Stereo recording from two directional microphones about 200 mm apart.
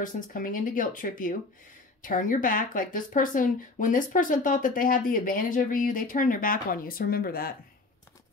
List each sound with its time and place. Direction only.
0.0 s speech: 45° left (ahead or behind)